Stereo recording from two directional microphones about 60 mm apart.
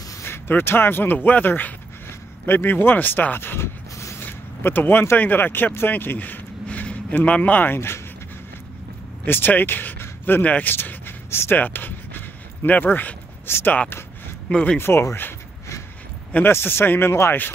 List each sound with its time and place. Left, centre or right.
0.2 s speech: left
4.2 s zipper: left
5.1 s speech: left
9.2 s speech: left
10.7 s writing: left
11.5 s a sound: left
12.6 s speech: left
14.5 s speech: centre
14.8 s speech: left
16.4 s speech: left